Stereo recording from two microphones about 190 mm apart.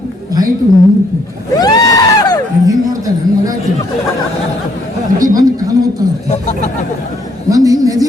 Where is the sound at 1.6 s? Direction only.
20° left (ahead or behind).